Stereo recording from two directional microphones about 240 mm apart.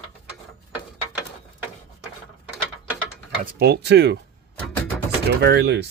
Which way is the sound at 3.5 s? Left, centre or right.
Right.